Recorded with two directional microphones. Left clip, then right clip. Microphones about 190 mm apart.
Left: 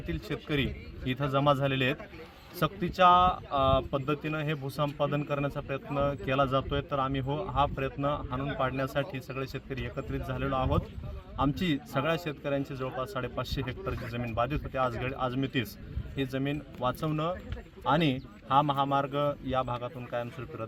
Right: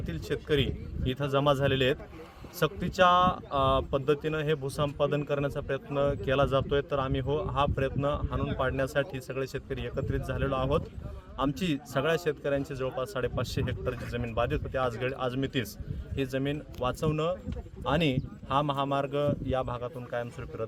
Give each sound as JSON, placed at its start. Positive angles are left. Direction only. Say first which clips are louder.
{"t": 0.1, "sound": "speech", "louder": "right 4 dB", "side_deg": -25}